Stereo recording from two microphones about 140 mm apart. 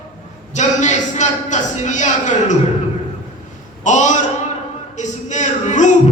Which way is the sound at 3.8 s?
60° left (ahead or behind).